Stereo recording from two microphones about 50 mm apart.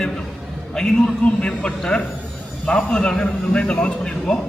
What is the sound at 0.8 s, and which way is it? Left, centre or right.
A man's voice, centre.